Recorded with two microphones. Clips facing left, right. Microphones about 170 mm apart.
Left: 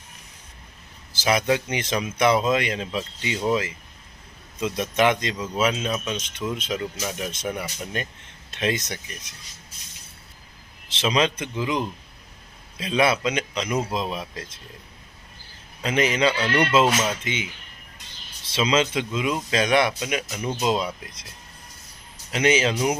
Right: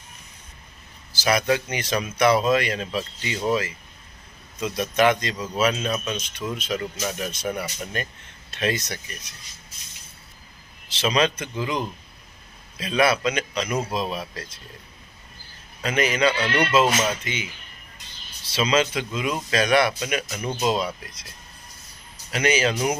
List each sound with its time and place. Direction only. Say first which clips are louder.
1.1 s speech: even; 25° left (ahead or behind)
5.7 s speech: even; 10° left (ahead or behind)
6.1 s speech: left 1 dB; 20° left (ahead or behind)
10.9 s speech: even; 20° left (ahead or behind)
15.8 s speech: even; 25° left (ahead or behind)
18.5 s speech: even; 25° left (ahead or behind)
22.3 s speech: left 1 dB; 25° left (ahead or behind)